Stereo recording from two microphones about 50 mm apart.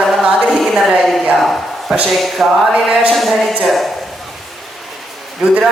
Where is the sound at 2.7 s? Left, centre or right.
Centre.